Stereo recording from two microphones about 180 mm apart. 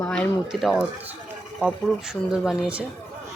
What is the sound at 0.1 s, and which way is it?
Speech, centre (ahead or behind).